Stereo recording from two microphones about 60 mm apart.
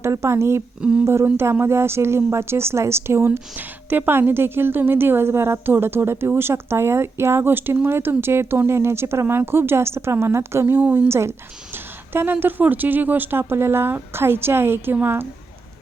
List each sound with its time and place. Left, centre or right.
0.1 s a woman's voice: right
3.5 s a woman's voice: right
10.8 s a woman's voice: right
11.1 s a woman's voice: right